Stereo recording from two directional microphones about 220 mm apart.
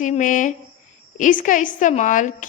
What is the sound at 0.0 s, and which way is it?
A woman's voice, 35° left (ahead or behind).